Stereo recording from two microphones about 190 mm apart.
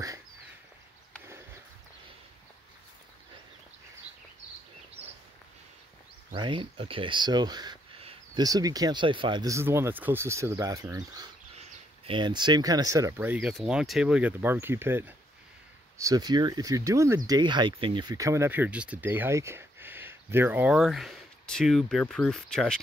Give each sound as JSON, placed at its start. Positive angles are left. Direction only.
{"t": 6.3, "sound": "speech", "side_deg": -25}